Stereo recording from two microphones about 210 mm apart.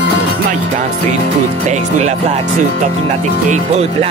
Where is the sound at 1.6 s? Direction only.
35° right (ahead or behind).